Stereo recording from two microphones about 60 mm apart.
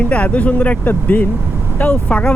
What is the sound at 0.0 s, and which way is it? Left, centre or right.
Speech, left.